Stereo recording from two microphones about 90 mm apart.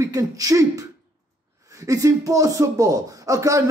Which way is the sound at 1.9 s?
40° right (ahead or behind).